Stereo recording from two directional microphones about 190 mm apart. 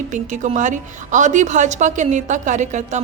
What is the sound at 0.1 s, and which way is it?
A woman's voice, 40° right (ahead or behind).